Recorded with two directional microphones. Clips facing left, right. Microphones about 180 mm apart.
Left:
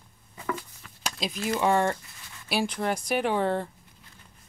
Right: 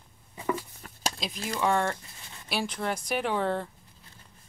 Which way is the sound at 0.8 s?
45° right (ahead or behind).